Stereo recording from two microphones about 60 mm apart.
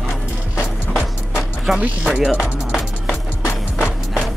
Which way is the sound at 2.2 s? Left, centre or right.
Centre.